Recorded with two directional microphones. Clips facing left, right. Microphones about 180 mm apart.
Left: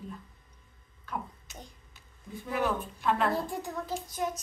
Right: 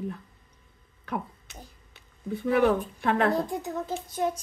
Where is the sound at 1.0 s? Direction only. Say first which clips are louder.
Right 5 dB; 65° right (ahead or behind).